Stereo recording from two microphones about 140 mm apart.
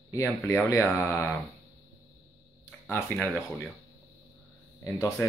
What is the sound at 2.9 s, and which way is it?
Speech, 15° left (ahead or behind).